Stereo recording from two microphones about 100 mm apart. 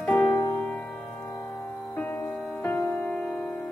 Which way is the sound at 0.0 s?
5° left (ahead or behind).